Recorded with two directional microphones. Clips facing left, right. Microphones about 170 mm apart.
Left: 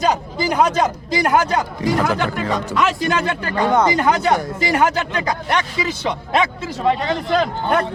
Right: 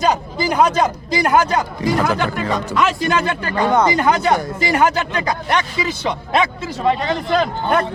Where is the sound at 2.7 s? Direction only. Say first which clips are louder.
Right 1 dB; 5° left (ahead or behind).